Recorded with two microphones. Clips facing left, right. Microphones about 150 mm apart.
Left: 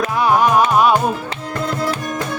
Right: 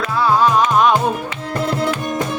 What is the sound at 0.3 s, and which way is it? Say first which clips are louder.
Music: even; 15° left (ahead or behind).